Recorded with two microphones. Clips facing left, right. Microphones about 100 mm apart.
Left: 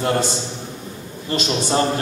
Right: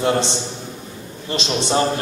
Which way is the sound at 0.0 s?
25° right (ahead or behind).